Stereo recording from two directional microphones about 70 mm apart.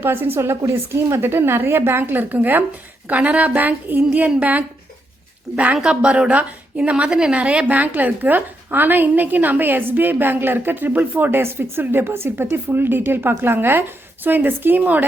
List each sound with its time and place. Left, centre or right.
0.0 s a woman's voice: right
5.7 s a woman's voice: centre